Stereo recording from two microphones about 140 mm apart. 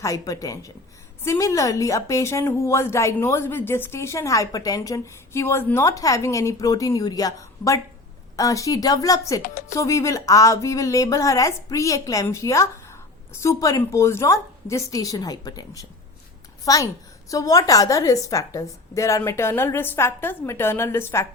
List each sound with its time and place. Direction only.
0.0 s a woman's voice: 25° left (ahead or behind)